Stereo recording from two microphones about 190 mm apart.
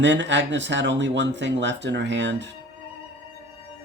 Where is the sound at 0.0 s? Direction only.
70° right (ahead or behind).